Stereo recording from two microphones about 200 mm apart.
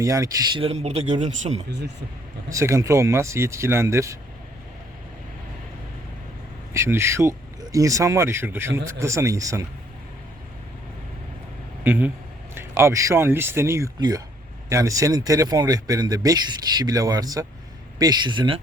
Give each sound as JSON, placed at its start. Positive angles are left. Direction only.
{"t": 0.0, "sound": "speech", "side_deg": -15}
{"t": 0.6, "sound": "speech", "side_deg": -30}
{"t": 2.5, "sound": "speech", "side_deg": -15}
{"t": 6.7, "sound": "speech", "side_deg": -15}
{"t": 11.8, "sound": "a man's voice", "side_deg": -10}